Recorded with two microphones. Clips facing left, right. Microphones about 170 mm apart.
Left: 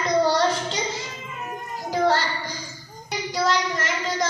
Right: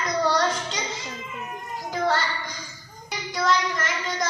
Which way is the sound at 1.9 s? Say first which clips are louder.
Left 3 dB; 30° left (ahead or behind).